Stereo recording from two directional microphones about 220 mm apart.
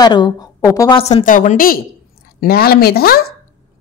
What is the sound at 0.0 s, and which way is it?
A woman's voice, 20° left (ahead or behind).